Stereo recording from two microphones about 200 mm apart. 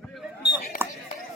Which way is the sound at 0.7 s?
45° left (ahead or behind).